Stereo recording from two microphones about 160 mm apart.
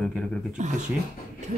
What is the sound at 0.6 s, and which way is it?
Speech, 50° right (ahead or behind).